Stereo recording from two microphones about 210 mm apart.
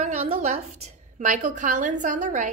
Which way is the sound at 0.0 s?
35° right (ahead or behind).